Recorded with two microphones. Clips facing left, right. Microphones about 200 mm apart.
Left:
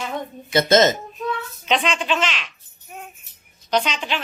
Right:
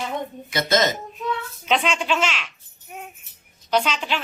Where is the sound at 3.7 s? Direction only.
5° right (ahead or behind).